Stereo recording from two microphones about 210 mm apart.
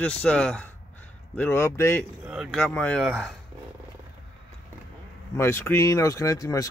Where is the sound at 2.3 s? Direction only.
Centre (ahead or behind).